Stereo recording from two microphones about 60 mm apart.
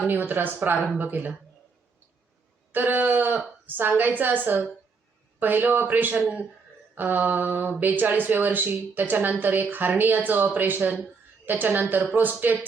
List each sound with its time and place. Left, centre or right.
0.1 s speech: right
2.7 s speech: right